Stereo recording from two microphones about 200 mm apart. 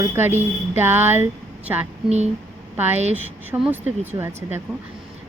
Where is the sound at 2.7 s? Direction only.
10° right (ahead or behind).